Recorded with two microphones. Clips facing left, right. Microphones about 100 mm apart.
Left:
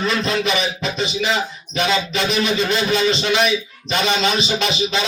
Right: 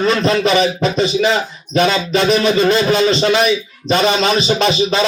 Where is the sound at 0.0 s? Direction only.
45° right (ahead or behind).